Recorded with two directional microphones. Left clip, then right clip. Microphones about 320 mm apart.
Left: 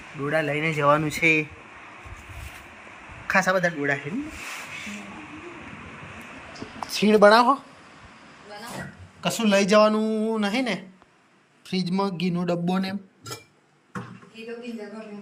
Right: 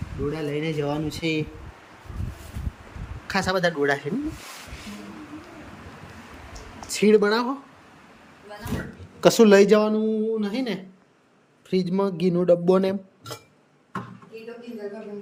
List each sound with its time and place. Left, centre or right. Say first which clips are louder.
0.3 s speech: left 4 dB; centre
0.9 s speech: left 8 dB; centre
3.3 s speech: left 1 dB; centre
6.9 s speech: left 3 dB; centre
9.2 s speech: right 7 dB; centre